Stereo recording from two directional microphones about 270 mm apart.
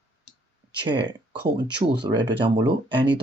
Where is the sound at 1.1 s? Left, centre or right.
Centre.